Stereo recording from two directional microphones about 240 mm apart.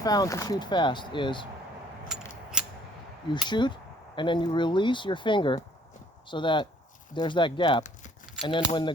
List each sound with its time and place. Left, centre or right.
0.0 s speech: centre
2.0 s mechanisms: centre
3.4 s speech: centre